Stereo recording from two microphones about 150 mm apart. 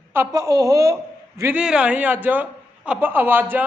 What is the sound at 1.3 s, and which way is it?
A man's voice, 10° right (ahead or behind).